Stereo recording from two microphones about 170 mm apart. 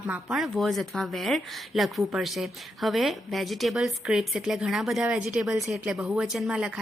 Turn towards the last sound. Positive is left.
turn(degrees=-5)  # may be behind; listen again after turning